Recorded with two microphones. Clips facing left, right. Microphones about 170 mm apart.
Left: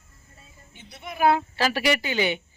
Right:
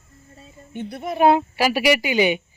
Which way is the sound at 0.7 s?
55° right (ahead or behind).